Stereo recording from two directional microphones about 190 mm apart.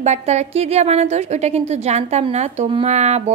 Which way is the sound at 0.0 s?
35° right (ahead or behind).